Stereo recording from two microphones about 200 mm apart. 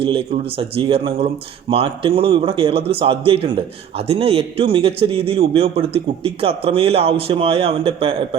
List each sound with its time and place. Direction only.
0.0 s a man's voice: 25° right (ahead or behind)